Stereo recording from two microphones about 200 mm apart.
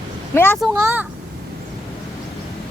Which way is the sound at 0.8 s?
10° right (ahead or behind).